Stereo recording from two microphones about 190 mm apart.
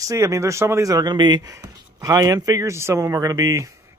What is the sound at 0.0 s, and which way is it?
Speech, 15° right (ahead or behind).